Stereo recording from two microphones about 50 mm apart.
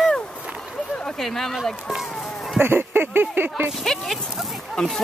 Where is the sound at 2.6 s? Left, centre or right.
Right.